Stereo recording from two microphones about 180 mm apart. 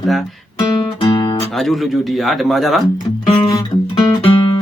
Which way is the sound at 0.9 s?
25° left (ahead or behind).